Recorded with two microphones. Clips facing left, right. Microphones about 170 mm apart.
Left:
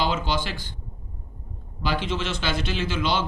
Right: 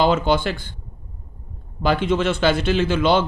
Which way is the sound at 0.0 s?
55° right (ahead or behind).